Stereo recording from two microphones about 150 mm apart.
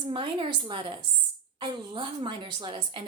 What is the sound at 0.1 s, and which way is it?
A woman's voice, 35° right (ahead or behind).